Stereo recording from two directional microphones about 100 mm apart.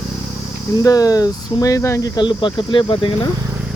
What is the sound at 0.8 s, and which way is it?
Speech, 35° left (ahead or behind).